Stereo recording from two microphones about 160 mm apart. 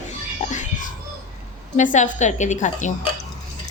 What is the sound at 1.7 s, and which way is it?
A woman's voice, 50° left (ahead or behind).